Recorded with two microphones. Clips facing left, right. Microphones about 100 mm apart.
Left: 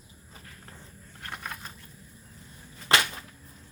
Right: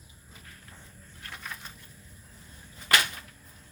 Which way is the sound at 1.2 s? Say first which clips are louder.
Left 3 dB; 55° left (ahead or behind).